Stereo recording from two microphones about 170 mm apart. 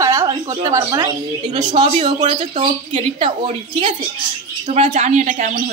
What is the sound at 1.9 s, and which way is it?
A woman's voice, 40° right (ahead or behind).